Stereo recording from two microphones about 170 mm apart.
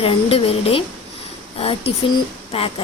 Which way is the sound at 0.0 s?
35° left (ahead or behind).